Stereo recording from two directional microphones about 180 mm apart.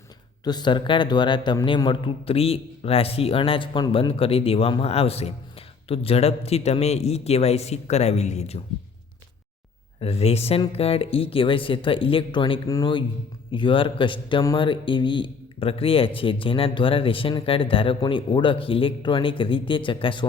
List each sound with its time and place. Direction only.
0.4 s a man's voice: 25° left (ahead or behind)
10.0 s a man's voice: 35° left (ahead or behind)